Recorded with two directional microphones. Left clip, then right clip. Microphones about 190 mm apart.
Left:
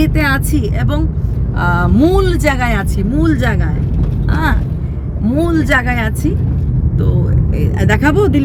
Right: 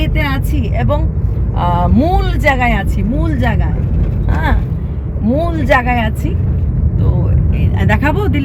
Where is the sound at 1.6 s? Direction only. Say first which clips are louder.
Left 1 dB; 20° left (ahead or behind).